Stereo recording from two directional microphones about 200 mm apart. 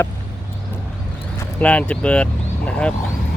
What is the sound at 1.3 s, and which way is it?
Vehicle, 5° left (ahead or behind).